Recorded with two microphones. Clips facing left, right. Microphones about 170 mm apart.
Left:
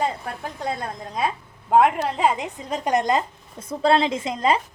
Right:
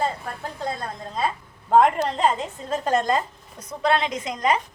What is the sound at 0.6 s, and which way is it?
A woman's voice, 15° left (ahead or behind).